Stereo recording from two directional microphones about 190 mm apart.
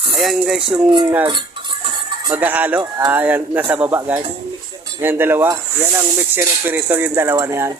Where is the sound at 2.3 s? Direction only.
10° right (ahead or behind).